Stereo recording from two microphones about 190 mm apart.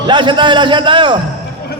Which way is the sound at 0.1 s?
25° right (ahead or behind).